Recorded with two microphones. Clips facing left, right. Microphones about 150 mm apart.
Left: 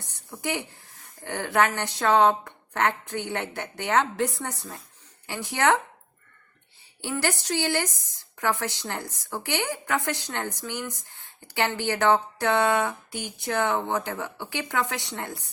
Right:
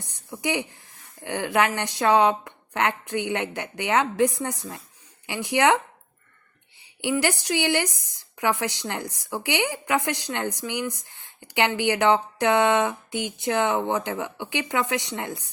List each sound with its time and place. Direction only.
0.0 s speech: 15° right (ahead or behind)
7.0 s speech: 15° right (ahead or behind)